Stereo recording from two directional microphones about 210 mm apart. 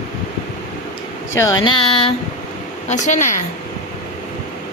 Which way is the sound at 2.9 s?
35° left (ahead or behind).